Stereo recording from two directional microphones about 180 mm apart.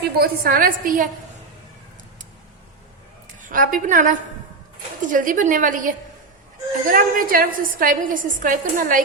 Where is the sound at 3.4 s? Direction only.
50° right (ahead or behind).